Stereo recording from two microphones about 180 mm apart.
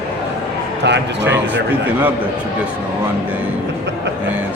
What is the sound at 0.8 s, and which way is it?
Speech, 75° right (ahead or behind).